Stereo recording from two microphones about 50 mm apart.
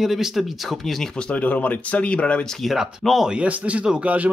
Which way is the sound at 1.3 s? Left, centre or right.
Left.